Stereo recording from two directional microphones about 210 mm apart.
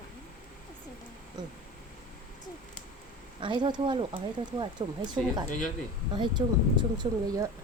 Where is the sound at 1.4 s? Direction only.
20° right (ahead or behind).